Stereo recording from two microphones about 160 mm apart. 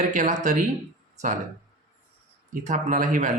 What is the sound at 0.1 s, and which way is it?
Speech, 50° right (ahead or behind).